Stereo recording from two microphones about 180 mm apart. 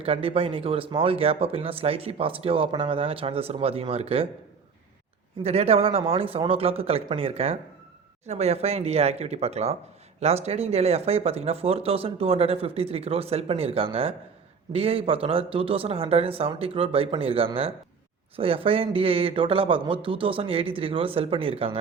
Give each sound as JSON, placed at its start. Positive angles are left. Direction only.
{"t": 0.0, "sound": "speech", "side_deg": -30}
{"t": 5.4, "sound": "speech", "side_deg": -35}